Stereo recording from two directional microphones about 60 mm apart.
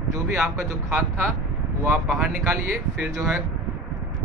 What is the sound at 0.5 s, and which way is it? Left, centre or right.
Speech, right.